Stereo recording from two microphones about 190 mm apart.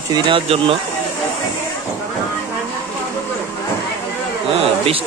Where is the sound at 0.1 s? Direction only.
25° right (ahead or behind).